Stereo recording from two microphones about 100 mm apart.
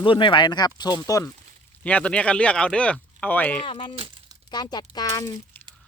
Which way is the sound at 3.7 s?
60° left (ahead or behind).